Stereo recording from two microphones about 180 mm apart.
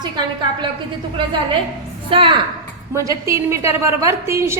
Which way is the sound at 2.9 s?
15° right (ahead or behind).